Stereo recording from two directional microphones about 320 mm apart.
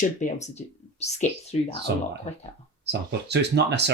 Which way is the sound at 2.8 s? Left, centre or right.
Right.